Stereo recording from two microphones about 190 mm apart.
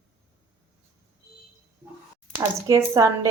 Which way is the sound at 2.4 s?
20° right (ahead or behind).